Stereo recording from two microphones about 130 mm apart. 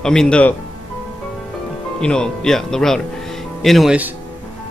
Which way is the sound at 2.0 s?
5° left (ahead or behind).